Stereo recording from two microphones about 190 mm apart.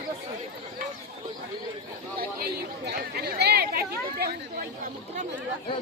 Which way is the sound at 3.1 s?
55° right (ahead or behind).